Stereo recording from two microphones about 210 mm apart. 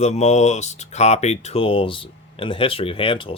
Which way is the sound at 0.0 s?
30° left (ahead or behind).